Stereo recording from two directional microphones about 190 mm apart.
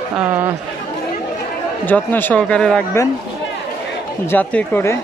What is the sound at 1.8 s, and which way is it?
Speech, 10° left (ahead or behind).